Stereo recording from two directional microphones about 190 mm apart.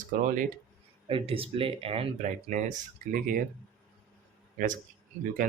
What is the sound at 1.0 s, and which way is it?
Speech, 30° right (ahead or behind).